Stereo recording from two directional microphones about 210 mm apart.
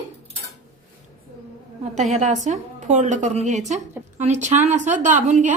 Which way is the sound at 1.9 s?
35° right (ahead or behind).